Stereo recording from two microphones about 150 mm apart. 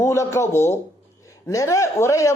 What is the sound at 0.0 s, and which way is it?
A man's voice, 20° left (ahead or behind).